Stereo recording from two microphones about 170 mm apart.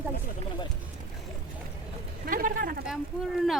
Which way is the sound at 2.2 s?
55° right (ahead or behind).